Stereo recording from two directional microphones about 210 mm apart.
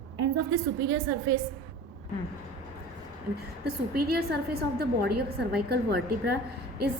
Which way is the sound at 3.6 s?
50° right (ahead or behind).